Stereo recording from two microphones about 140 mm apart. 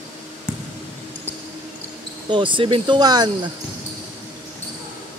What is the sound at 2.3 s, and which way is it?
Speech, 35° right (ahead or behind).